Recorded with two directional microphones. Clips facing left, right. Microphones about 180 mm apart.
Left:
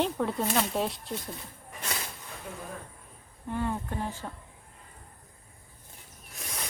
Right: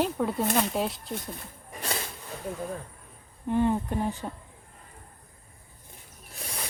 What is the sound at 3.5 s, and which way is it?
Speech, 20° right (ahead or behind).